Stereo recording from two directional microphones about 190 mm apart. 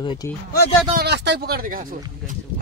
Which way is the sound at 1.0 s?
65° right (ahead or behind).